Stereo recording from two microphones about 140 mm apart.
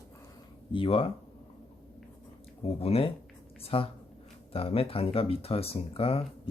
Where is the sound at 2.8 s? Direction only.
45° left (ahead or behind).